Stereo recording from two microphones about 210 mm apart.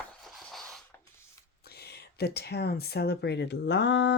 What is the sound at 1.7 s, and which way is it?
Speech, 50° left (ahead or behind).